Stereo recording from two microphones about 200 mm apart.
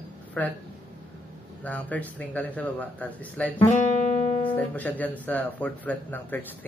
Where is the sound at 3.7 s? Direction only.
35° left (ahead or behind).